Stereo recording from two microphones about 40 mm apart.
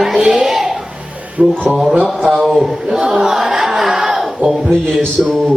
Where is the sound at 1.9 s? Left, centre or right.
Right.